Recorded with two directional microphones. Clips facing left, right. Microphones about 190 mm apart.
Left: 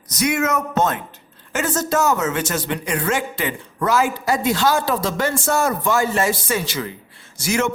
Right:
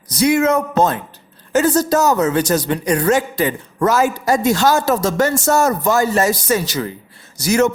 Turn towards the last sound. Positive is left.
turn(degrees=-40)  # may be behind; listen again after turning